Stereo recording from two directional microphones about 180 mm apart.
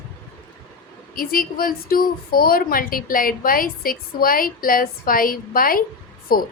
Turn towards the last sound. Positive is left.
turn(degrees=55)  # may be behind; listen again after turning